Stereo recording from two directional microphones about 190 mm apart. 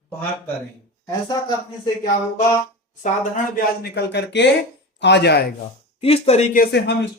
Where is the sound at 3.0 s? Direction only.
45° left (ahead or behind).